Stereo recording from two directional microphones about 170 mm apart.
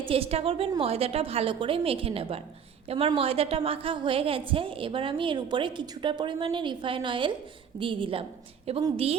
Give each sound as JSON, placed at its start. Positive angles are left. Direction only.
{"t": 0.0, "sound": "a woman's voice", "side_deg": -35}